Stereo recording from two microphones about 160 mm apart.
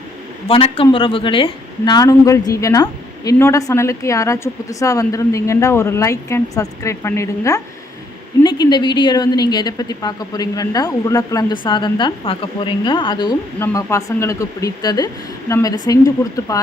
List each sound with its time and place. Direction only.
0.4 s a woman's voice: 35° left (ahead or behind)
13.6 s a woman's voice: 15° left (ahead or behind)